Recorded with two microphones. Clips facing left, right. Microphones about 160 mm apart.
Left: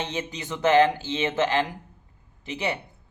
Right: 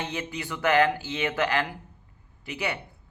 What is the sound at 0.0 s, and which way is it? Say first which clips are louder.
A man's voice: left 2 dB; 20° left (ahead or behind).